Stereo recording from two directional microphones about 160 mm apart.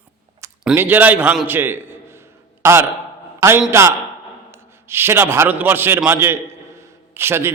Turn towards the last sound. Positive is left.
turn(degrees=-15)  # may be behind; listen again after turning